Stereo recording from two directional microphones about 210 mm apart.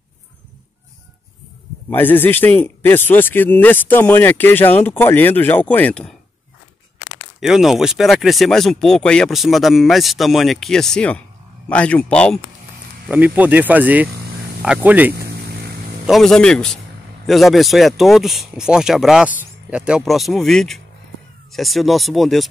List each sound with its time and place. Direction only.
1.9 s a man's voice: 10° left (ahead or behind)
7.3 s speech: centre (ahead or behind)
13.1 s speech: 5° right (ahead or behind)
15.1 s vehicle: 50° right (ahead or behind)
16.1 s speech: centre (ahead or behind)